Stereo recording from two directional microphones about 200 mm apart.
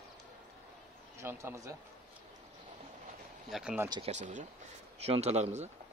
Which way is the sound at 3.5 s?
5° right (ahead or behind).